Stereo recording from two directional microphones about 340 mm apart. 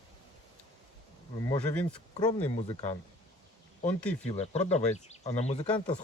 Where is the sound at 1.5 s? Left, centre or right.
Centre.